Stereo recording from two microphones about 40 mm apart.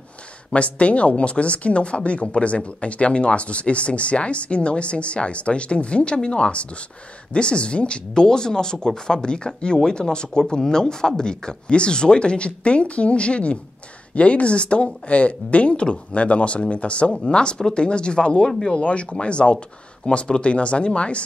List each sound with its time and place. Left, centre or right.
0.5 s speech: left
18.5 s speech: centre
18.8 s speech: left